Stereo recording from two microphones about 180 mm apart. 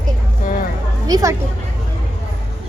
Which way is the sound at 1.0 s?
20° right (ahead or behind).